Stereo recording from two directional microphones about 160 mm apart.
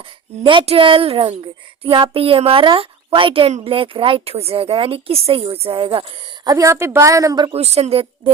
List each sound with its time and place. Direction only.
0.4 s a woman's voice: 35° right (ahead or behind)
7.6 s a woman's voice: 40° right (ahead or behind)